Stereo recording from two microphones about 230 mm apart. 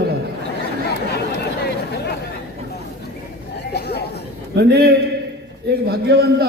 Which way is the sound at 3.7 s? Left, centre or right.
Left.